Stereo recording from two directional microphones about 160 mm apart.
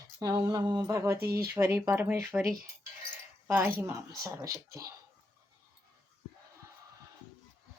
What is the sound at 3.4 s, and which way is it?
Speech, 15° right (ahead or behind).